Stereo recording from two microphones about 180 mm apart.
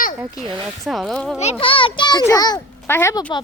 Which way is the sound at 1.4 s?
35° left (ahead or behind).